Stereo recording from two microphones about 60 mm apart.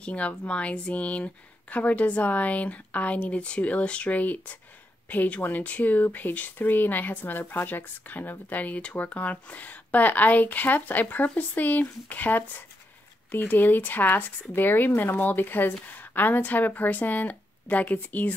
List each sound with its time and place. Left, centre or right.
0.0 s a woman's voice: left